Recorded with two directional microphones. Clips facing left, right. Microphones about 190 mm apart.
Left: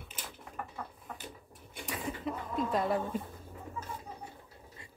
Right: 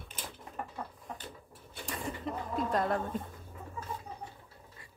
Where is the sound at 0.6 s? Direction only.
25° right (ahead or behind).